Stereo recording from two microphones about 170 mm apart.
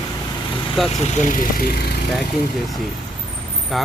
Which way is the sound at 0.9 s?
40° left (ahead or behind).